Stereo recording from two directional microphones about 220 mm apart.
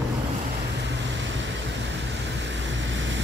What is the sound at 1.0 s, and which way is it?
Vehicle, 55° right (ahead or behind).